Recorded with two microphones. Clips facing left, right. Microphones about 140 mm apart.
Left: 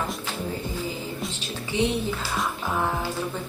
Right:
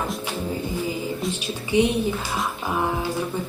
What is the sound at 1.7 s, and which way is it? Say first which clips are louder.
Speech: right 5 dB; 15° right (ahead or behind).